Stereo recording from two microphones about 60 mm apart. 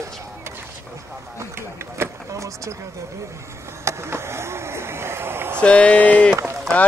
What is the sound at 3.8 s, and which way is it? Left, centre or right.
Vehicle, right.